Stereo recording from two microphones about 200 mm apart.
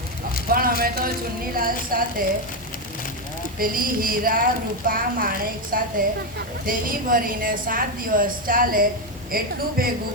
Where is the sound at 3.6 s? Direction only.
45° right (ahead or behind).